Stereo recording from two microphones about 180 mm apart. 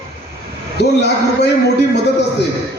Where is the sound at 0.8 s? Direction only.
65° left (ahead or behind).